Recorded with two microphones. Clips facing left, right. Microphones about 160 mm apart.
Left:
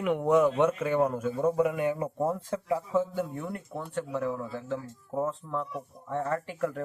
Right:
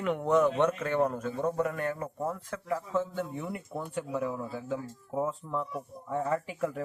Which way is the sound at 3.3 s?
5° right (ahead or behind).